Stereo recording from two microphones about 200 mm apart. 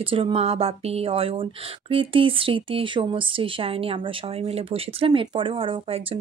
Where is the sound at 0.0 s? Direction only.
25° right (ahead or behind).